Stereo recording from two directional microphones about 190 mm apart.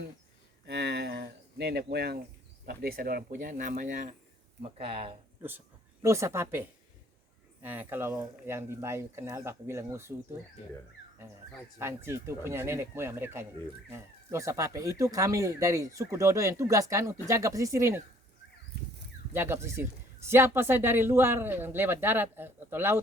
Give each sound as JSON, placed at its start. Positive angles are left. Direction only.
{"t": 0.6, "sound": "a sound", "side_deg": -60}
{"t": 2.6, "sound": "speech", "side_deg": -50}
{"t": 4.8, "sound": "speech", "side_deg": -30}
{"t": 5.4, "sound": "speech", "side_deg": -10}
{"t": 11.8, "sound": "speech", "side_deg": -15}
{"t": 19.3, "sound": "speech", "side_deg": -10}